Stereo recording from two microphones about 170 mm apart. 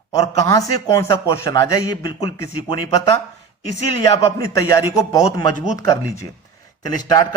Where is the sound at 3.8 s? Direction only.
40° left (ahead or behind).